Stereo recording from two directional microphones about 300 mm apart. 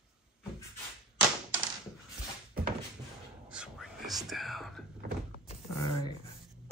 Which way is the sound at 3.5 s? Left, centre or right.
Centre.